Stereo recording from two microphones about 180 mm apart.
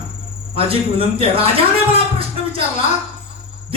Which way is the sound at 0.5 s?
30° right (ahead or behind).